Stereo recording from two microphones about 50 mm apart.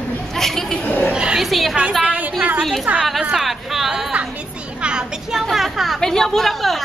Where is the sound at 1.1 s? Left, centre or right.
Centre.